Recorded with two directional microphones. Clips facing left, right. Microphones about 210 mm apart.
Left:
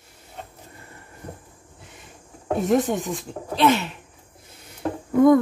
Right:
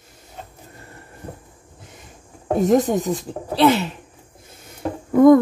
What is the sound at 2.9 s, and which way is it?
Speech, 40° right (ahead or behind).